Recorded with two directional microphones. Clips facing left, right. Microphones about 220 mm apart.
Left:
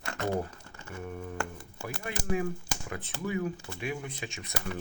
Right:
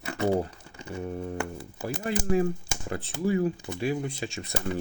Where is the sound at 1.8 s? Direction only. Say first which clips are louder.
Right 8 dB; 35° right (ahead or behind).